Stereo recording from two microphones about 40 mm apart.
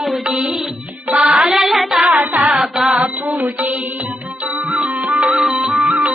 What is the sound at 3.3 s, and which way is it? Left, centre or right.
Music, right.